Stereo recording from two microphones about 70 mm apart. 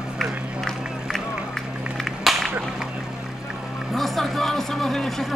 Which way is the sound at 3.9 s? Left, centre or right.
Centre.